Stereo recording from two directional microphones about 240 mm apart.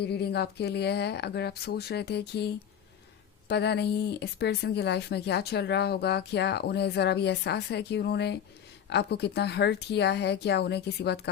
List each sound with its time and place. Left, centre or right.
0.0 s speech: left
3.5 s speech: left